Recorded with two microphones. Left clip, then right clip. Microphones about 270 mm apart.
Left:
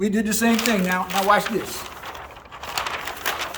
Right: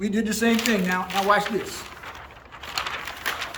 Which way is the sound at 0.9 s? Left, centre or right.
Left.